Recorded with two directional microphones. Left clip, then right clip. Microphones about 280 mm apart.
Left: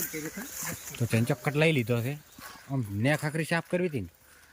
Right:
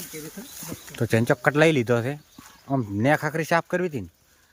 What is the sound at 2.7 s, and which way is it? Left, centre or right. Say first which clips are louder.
Speech: right 10 dB; right.